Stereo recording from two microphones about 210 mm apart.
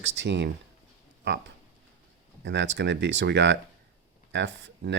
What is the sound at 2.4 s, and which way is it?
Speech, 60° right (ahead or behind).